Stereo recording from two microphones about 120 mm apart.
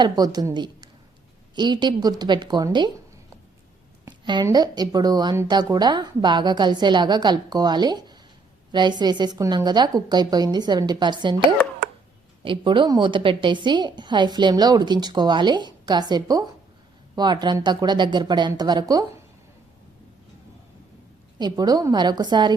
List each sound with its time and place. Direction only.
0.0 s a woman's voice: 35° right (ahead or behind)
4.5 s a woman's voice: 35° right (ahead or behind)
21.3 s a woman's voice: 35° right (ahead or behind)